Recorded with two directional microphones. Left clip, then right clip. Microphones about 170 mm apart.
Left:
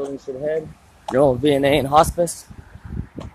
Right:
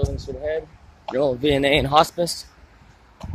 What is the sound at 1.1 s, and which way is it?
Speech, 20° left (ahead or behind).